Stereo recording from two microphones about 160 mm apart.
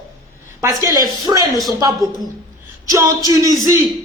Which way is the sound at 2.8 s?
20° right (ahead or behind).